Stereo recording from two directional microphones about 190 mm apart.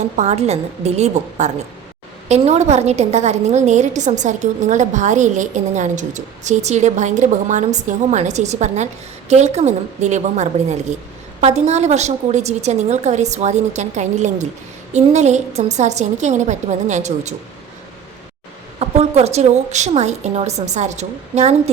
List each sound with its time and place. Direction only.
0.2 s a woman's voice: 35° right (ahead or behind)
18.8 s a woman's voice: 35° right (ahead or behind)